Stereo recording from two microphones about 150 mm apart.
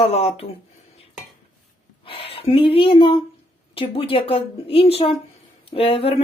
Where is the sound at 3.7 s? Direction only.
35° left (ahead or behind).